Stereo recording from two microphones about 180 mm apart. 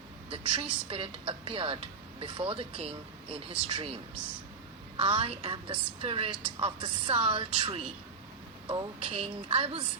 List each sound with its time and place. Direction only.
0.3 s a woman's voice: 30° right (ahead or behind)